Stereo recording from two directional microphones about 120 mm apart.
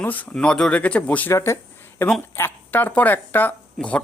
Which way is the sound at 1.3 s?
25° left (ahead or behind).